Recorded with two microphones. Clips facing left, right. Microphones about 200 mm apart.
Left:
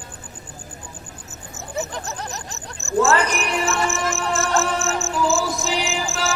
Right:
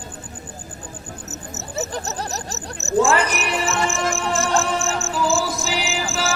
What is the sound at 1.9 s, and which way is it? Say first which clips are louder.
Laughter: right 3 dB; 35° right (ahead or behind).